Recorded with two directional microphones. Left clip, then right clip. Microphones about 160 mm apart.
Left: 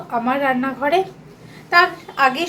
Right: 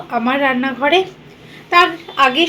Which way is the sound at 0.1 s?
30° right (ahead or behind).